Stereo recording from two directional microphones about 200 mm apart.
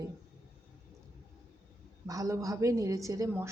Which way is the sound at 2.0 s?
15° right (ahead or behind).